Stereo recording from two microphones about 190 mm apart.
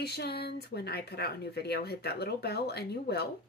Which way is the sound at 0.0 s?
60° left (ahead or behind).